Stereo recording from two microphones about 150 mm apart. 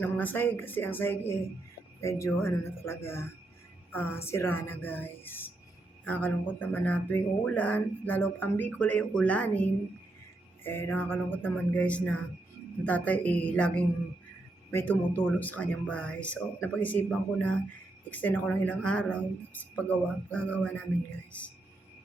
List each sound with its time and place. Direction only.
0.0 s speech: 10° left (ahead or behind)